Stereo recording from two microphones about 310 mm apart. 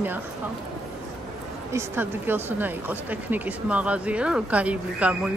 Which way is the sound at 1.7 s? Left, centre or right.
Centre.